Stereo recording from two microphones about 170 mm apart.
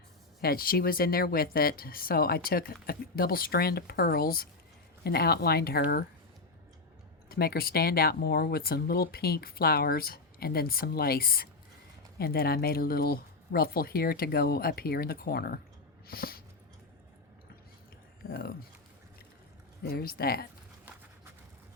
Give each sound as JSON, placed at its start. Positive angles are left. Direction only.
{"t": 0.4, "sound": "speech", "side_deg": 60}
{"t": 7.3, "sound": "speech", "side_deg": 65}
{"t": 16.0, "sound": "a sound", "side_deg": 65}
{"t": 18.3, "sound": "speech", "side_deg": 60}
{"t": 19.8, "sound": "speech", "side_deg": 65}